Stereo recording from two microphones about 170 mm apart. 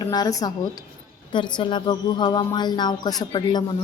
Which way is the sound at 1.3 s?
25° left (ahead or behind).